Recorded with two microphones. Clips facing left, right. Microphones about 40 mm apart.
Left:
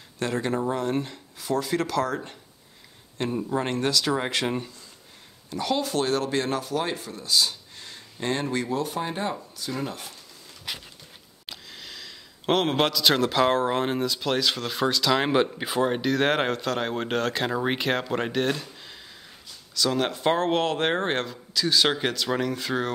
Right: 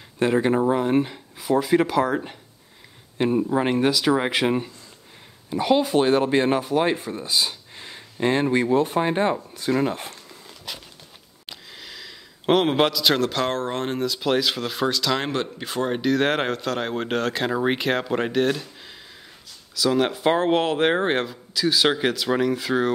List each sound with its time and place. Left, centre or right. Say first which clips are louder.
0.2 s speech: right 7 dB; centre; by 10.1 s right
11.4 s speech: right 1 dB; centre